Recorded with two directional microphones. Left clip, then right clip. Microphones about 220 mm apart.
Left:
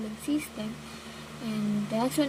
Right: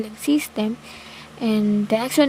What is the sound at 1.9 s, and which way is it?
Speech, 50° right (ahead or behind).